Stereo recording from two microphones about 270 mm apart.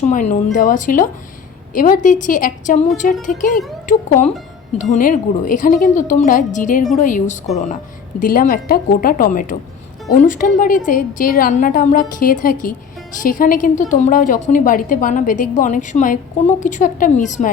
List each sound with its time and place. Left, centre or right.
0.1 s a woman's voice: left